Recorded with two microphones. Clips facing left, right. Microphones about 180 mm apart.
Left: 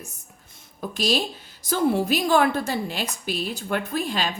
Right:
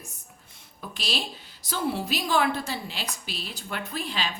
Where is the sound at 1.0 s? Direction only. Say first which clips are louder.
Left 9 dB; 45° left (ahead or behind).